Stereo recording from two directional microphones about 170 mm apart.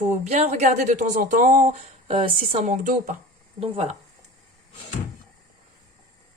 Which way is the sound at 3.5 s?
35° right (ahead or behind).